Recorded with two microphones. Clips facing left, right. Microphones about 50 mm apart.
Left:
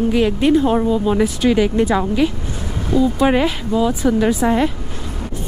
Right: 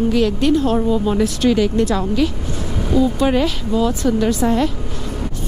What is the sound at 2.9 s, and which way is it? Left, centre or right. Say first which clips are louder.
Speech: left 1 dB; centre.